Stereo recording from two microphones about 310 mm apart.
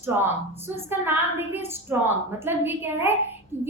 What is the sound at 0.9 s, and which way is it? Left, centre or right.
A woman's voice, centre.